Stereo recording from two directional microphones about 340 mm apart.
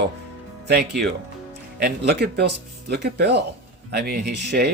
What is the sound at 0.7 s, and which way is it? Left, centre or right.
Speech, right.